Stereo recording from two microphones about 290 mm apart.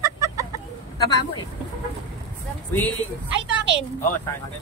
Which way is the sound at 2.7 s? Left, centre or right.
Centre.